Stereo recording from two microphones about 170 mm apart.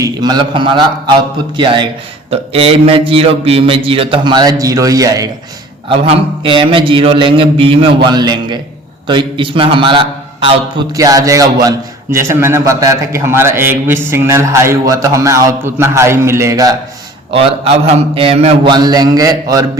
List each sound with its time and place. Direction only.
0.0 s a man's voice: 25° right (ahead or behind)
5.9 s a man's voice: 30° right (ahead or behind)
10.9 s a man's voice: 20° right (ahead or behind)
17.3 s a man's voice: 35° right (ahead or behind)